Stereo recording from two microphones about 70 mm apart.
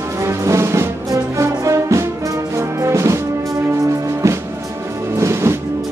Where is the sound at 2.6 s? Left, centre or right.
Right.